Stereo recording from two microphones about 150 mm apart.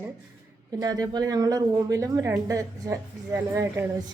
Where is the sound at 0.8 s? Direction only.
25° right (ahead or behind).